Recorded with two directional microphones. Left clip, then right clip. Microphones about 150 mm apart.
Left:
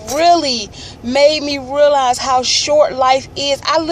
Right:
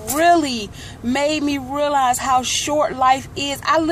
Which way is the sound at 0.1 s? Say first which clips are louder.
Left 3 dB; 5° right (ahead or behind).